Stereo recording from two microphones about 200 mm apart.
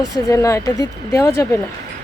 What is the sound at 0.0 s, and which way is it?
Speech, 15° left (ahead or behind).